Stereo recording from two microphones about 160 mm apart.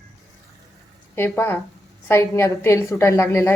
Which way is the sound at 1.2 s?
15° left (ahead or behind).